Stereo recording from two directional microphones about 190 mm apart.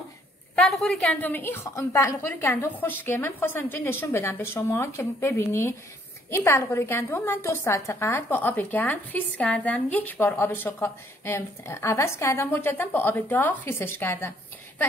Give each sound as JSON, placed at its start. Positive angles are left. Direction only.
{"t": 0.6, "sound": "a woman's voice", "side_deg": 0}